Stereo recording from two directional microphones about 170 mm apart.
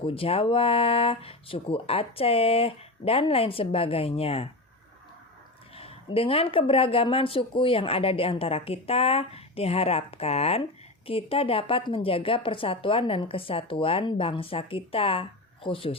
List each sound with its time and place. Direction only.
0.0 s speech: 35° left (ahead or behind)
5.7 s speech: 35° left (ahead or behind)